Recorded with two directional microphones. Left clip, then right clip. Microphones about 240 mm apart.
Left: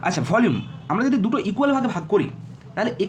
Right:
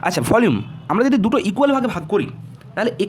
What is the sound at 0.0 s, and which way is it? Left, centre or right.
Speech, right.